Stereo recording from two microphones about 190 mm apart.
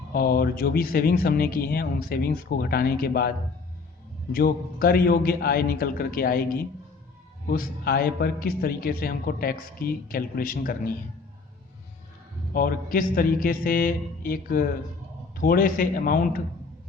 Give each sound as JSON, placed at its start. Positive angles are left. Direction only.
{"t": 0.1, "sound": "a man's voice", "side_deg": 50}
{"t": 7.5, "sound": "a man's voice", "side_deg": 50}
{"t": 12.5, "sound": "a man's voice", "side_deg": 50}